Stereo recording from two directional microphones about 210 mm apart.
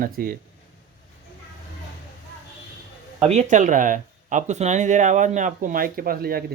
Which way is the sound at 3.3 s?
35° right (ahead or behind).